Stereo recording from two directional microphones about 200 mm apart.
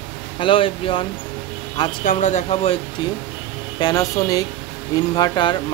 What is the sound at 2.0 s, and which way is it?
Speech, 35° left (ahead or behind).